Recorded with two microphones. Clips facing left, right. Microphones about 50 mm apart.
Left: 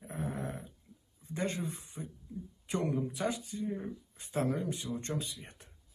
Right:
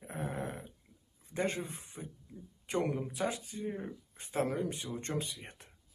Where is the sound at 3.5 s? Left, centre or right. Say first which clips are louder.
Left 2 dB; right.